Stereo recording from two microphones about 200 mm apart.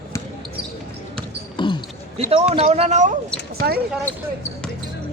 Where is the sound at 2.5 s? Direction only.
30° right (ahead or behind).